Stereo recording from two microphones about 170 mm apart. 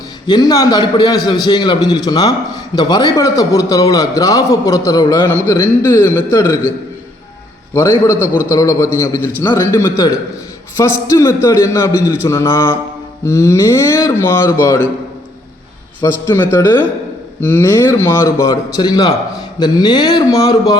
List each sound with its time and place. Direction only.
0.3 s a man's voice: 25° left (ahead or behind)
7.7 s a man's voice: 15° left (ahead or behind)
8.1 s a man's voice: 10° right (ahead or behind)
8.5 s a man's voice: 20° left (ahead or behind)
16.0 s a man's voice: 15° left (ahead or behind)